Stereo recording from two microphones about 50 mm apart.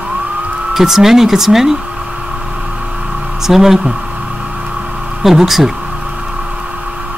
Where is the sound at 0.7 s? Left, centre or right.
Centre.